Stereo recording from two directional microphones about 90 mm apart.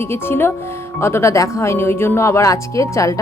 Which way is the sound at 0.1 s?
25° left (ahead or behind).